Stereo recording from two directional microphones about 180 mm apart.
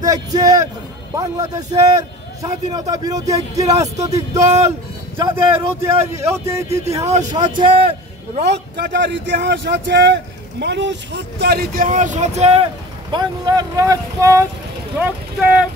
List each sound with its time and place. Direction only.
0.0 s a man's voice: 20° right (ahead or behind)
6.7 s a man's voice: 35° right (ahead or behind)
8.7 s speech: 70° right (ahead or behind); by 12.6 s 35° right (ahead or behind)
13.1 s a man's voice: 25° right (ahead or behind)
15.0 s speech: 5° right (ahead or behind)